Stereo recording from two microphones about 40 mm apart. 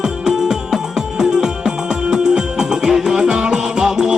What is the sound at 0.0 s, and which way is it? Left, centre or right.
Music, centre.